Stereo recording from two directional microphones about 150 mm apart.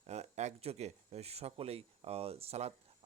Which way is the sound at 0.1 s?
50° right (ahead or behind).